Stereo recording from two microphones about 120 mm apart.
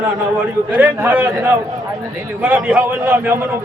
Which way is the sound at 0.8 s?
15° right (ahead or behind).